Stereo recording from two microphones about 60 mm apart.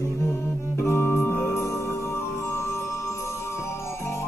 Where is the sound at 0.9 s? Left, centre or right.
Left.